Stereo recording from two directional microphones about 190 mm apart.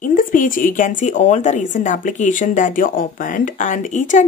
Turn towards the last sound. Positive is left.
turn(degrees=40)  # may be behind; listen again after turning